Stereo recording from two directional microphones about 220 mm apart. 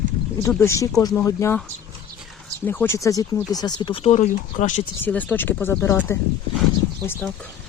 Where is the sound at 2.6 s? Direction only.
10° left (ahead or behind); by 4.8 s 30° left (ahead or behind).